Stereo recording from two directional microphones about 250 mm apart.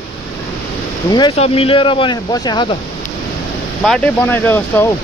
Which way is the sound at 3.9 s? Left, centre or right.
Centre.